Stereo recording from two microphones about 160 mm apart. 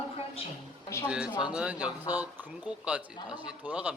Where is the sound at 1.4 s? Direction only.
5° right (ahead or behind).